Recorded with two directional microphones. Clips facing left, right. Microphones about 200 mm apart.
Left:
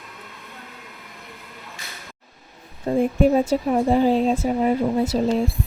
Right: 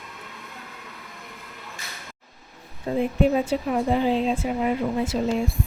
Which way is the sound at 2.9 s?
45° left (ahead or behind).